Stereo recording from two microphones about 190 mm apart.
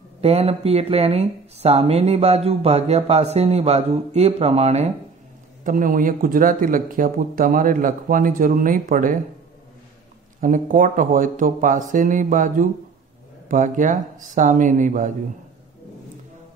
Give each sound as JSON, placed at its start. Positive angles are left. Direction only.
{"t": 0.2, "sound": "speech", "side_deg": -30}
{"t": 5.6, "sound": "speech", "side_deg": -45}
{"t": 10.4, "sound": "speech", "side_deg": -45}